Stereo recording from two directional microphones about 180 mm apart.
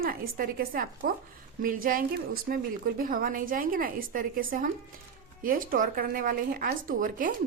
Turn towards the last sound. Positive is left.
turn(degrees=-50)  # may be behind; listen again after turning